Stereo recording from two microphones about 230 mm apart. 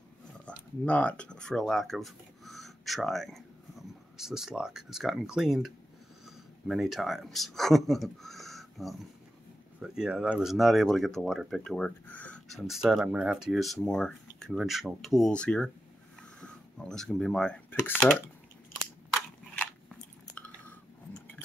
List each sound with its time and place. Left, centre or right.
0.5 s speech: centre
19.1 s crushing: centre
20.3 s chewing: centre